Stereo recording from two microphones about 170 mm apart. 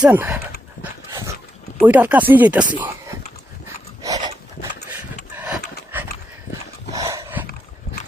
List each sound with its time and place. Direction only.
0.0 s speech: 10° right (ahead or behind)
0.8 s dog: 15° right (ahead or behind)
1.8 s speech: 10° right (ahead or behind)
4.0 s a sound: 20° right (ahead or behind)
6.9 s dog: 20° right (ahead or behind)